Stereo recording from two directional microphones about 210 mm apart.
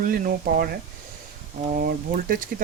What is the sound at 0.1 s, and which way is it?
Speech, 40° right (ahead or behind).